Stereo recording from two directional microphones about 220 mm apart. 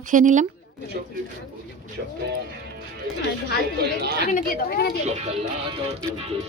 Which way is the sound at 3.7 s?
45° right (ahead or behind).